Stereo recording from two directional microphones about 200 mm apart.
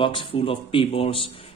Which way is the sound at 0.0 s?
25° left (ahead or behind).